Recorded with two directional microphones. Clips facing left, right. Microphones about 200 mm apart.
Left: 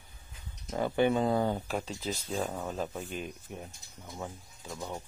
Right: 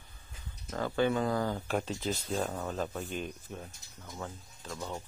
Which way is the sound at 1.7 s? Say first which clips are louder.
Right 2 dB; centre (ahead or behind).